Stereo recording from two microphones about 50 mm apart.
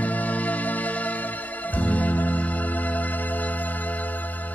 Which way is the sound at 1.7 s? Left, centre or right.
Left.